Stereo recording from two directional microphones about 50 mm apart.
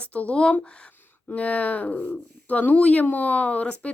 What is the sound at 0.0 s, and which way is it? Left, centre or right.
Speech, left.